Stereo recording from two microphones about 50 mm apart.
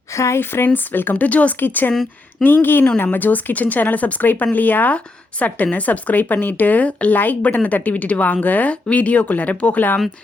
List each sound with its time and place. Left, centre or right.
0.1 s speech: left
0.3 s speech: left
1.5 s speech: left